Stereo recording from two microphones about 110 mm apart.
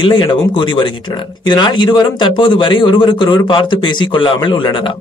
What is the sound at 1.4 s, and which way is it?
A man's voice, 45° left (ahead or behind).